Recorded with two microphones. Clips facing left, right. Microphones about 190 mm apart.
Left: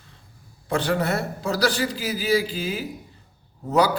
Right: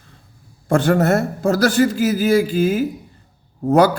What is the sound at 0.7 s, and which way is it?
A man's voice, 50° right (ahead or behind).